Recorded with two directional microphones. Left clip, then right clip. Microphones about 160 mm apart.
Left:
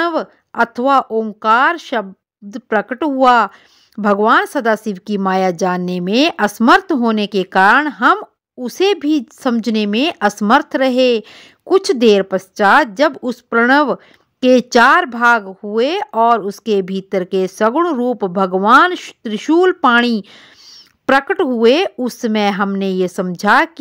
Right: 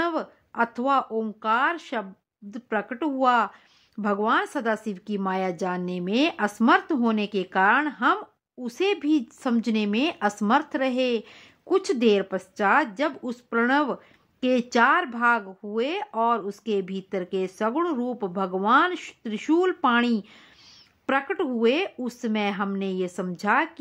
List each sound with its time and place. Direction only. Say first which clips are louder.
0.0 s speech: left 9 dB; 45° left (ahead or behind)